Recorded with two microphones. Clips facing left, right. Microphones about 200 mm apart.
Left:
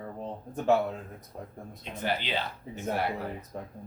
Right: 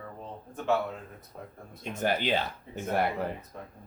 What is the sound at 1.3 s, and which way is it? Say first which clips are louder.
Speech: left 2 dB; 25° left (ahead or behind).